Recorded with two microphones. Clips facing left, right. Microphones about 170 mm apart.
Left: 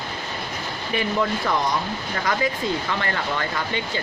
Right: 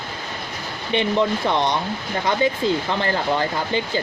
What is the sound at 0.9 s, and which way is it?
Speech, 25° right (ahead or behind).